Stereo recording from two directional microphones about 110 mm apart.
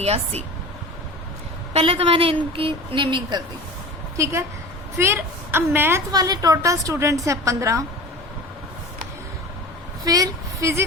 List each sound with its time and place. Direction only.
0.0 s speech: 70° right (ahead or behind)
1.7 s speech: 60° right (ahead or behind); by 3.4 s 45° right (ahead or behind)
4.2 s a woman's voice: 25° right (ahead or behind)
6.1 s a woman's voice: 35° right (ahead or behind)
10.0 s speech: 35° right (ahead or behind)